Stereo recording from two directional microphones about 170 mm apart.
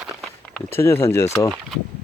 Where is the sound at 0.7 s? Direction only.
15° left (ahead or behind).